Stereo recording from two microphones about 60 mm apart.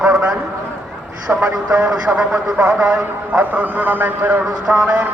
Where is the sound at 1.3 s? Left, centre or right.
Right.